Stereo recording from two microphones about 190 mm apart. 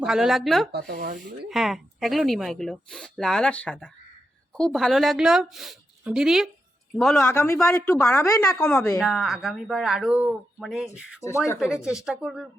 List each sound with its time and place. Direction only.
0.0 s speech: 5° right (ahead or behind)
0.7 s speech: 60° right (ahead or behind)
1.5 s a woman's voice: centre (ahead or behind)
9.0 s speech: centre (ahead or behind)
11.2 s a woman's voice: 15° left (ahead or behind)
11.6 s speech: 5° right (ahead or behind)